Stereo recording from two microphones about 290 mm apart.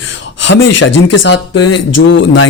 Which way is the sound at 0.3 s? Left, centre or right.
Left.